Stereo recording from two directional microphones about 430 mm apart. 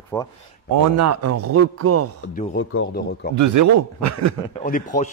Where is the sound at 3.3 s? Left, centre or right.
Right.